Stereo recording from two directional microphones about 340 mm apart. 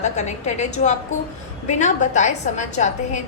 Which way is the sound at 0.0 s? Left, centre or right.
Centre.